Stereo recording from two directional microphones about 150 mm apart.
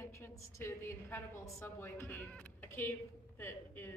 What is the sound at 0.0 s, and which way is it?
A woman's voice, 15° left (ahead or behind).